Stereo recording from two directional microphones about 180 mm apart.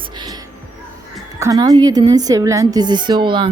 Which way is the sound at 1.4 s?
20° right (ahead or behind).